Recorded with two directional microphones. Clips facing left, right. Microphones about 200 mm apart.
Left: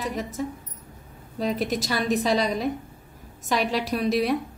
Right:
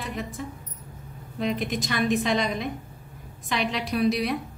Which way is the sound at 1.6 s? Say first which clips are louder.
Left 1 dB; 40° left (ahead or behind).